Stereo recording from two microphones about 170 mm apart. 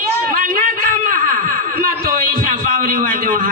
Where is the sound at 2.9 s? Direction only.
55° right (ahead or behind).